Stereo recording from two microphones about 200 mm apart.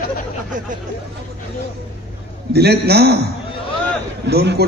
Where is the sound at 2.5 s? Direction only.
55° right (ahead or behind).